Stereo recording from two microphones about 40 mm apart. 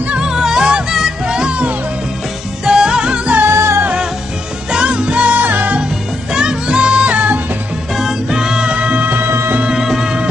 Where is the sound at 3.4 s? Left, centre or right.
Right.